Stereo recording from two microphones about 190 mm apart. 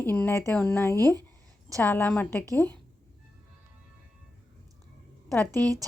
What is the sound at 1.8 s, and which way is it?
A woman's voice, 10° left (ahead or behind).